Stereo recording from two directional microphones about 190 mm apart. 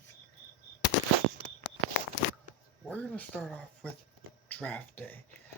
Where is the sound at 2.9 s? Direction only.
5° left (ahead or behind).